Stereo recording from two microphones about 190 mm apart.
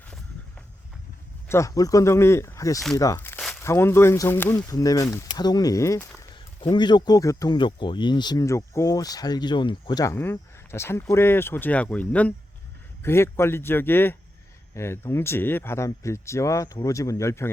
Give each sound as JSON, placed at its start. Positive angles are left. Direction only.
{"t": 1.5, "sound": "speech", "side_deg": 15}
{"t": 3.0, "sound": "a sound", "side_deg": 15}
{"t": 3.6, "sound": "speech", "side_deg": 15}